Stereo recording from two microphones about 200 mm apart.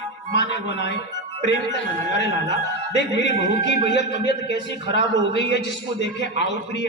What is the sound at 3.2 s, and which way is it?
A woman's voice, 65° left (ahead or behind).